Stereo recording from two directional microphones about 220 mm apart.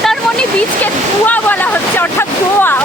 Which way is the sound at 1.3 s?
5° left (ahead or behind).